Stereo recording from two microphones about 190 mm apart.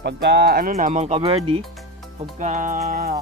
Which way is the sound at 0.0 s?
60° right (ahead or behind).